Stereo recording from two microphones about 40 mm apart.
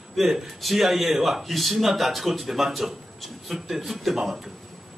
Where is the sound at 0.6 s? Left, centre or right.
Centre.